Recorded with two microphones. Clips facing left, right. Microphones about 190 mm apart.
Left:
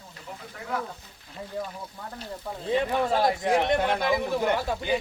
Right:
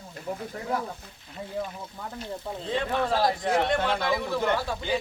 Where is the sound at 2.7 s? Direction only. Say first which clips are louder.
Left 2 dB; 10° left (ahead or behind).